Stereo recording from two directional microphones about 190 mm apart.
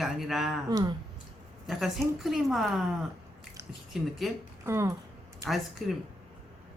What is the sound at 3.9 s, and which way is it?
Speech, centre (ahead or behind).